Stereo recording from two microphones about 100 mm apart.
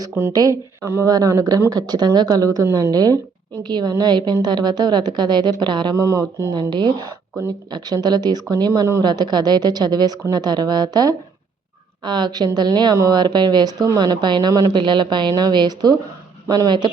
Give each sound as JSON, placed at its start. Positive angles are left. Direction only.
{"t": 0.3, "sound": "speech", "side_deg": -35}
{"t": 6.0, "sound": "speech", "side_deg": -30}
{"t": 6.5, "sound": "speech", "side_deg": -50}